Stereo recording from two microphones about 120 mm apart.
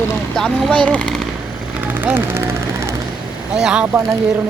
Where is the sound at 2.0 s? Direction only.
20° right (ahead or behind).